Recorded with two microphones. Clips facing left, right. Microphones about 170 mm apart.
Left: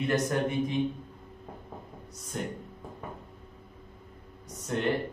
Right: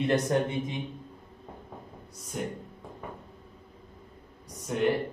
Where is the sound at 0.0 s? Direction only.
25° right (ahead or behind).